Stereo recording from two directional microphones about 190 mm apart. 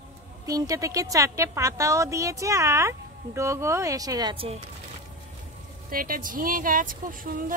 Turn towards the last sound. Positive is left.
turn(degrees=-45)  # may be behind; listen again after turning